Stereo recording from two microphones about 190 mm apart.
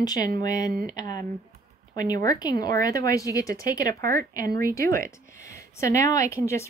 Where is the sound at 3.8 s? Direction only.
50° right (ahead or behind).